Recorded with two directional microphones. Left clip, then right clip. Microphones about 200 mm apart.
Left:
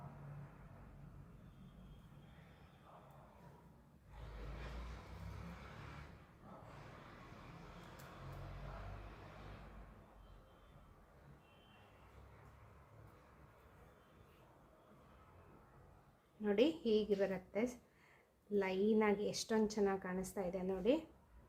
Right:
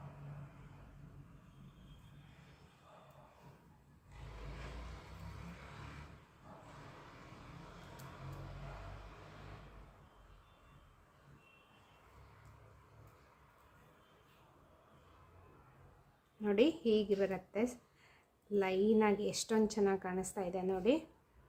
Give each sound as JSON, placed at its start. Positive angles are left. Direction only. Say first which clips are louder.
{"t": 16.4, "sound": "a woman's voice", "louder": "right 3 dB", "side_deg": -15}